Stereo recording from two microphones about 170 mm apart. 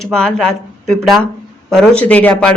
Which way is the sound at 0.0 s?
5° left (ahead or behind).